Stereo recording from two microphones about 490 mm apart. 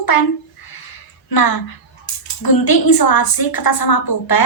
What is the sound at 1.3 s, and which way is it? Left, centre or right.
A woman's voice, left.